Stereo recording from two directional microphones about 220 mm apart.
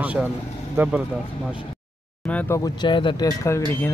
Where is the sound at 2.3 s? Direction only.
5° left (ahead or behind).